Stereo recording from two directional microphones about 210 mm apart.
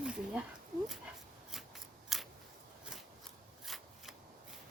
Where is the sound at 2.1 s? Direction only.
Centre (ahead or behind).